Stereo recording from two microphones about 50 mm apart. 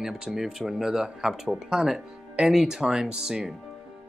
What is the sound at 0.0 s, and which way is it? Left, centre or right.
Speech, centre.